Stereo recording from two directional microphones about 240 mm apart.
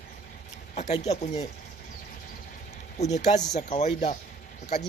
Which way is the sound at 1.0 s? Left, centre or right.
Left.